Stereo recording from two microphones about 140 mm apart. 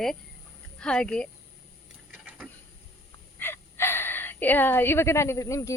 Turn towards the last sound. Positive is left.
turn(degrees=20)  # may be behind; listen again after turning